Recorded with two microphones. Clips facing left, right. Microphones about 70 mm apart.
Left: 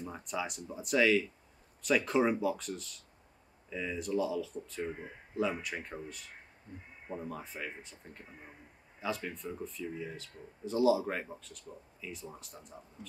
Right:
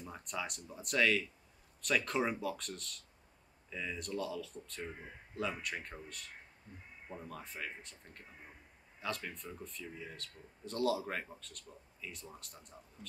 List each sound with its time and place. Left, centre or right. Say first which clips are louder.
0.0 s speech: left 4 dB; centre